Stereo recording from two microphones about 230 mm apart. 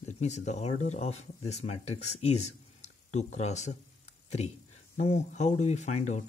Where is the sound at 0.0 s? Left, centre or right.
Left.